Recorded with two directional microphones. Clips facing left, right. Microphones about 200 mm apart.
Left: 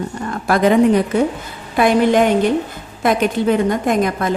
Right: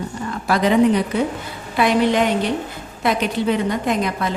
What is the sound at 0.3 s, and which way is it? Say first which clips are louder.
A woman's voice: left 4 dB; 50° left (ahead or behind).